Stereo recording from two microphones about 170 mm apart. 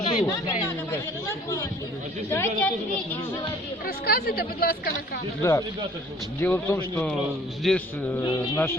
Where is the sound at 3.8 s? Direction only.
60° left (ahead or behind).